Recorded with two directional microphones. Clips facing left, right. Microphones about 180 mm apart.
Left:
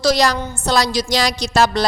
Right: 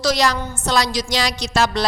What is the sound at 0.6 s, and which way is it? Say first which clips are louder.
A woman's voice: left 2 dB; 35° left (ahead or behind).